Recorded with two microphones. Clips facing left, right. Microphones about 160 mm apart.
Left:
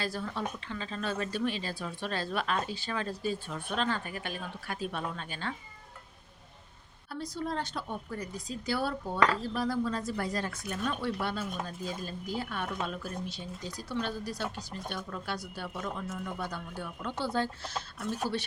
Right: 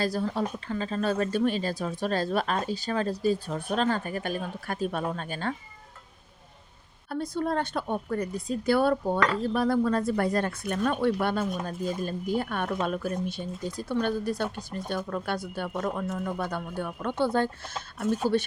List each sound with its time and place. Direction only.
0.0 s speech: 40° right (ahead or behind)
7.1 s a woman's voice: 55° right (ahead or behind)